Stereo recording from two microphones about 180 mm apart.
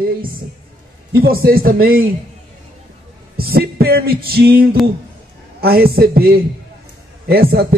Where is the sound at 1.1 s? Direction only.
55° right (ahead or behind).